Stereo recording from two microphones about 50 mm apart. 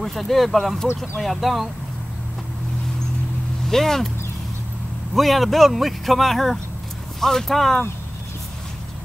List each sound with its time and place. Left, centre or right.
0.0 s speech: centre
3.6 s speech: centre
5.1 s speech: centre